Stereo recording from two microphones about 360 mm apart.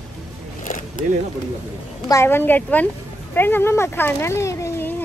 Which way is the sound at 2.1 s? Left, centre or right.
Centre.